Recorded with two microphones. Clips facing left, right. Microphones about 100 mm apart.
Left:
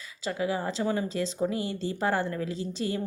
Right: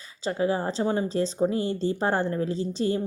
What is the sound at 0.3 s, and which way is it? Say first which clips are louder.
Speech: right 4 dB; 35° right (ahead or behind).